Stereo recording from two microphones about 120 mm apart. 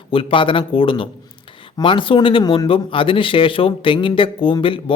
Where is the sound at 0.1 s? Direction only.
45° left (ahead or behind).